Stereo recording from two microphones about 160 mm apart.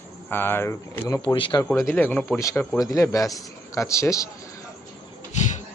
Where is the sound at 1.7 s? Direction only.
15° left (ahead or behind).